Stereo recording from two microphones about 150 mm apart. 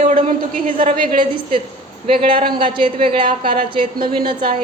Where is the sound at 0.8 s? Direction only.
35° right (ahead or behind).